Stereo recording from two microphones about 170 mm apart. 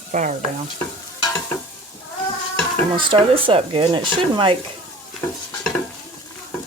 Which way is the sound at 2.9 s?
30° right (ahead or behind).